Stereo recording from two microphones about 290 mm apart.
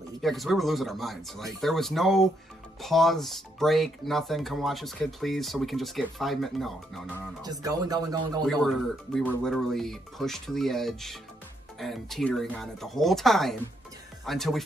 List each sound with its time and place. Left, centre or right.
0.2 s speech: centre
7.4 s speech: centre
8.5 s speech: centre